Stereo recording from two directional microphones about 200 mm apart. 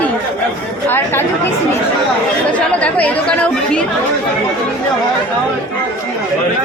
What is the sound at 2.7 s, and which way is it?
Speech, 5° left (ahead or behind).